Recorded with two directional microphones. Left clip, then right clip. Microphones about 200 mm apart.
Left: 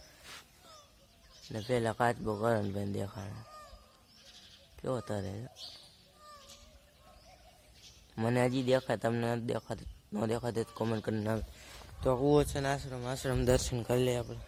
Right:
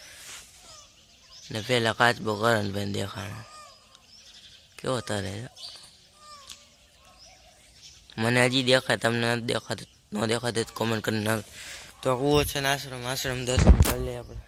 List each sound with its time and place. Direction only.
1.5 s speech: 10° right (ahead or behind)
4.8 s speech: 5° right (ahead or behind)
8.1 s a man's voice: 5° right (ahead or behind)
13.9 s speech: 45° left (ahead or behind)